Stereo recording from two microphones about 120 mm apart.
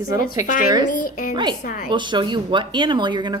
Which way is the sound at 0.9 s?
90° left.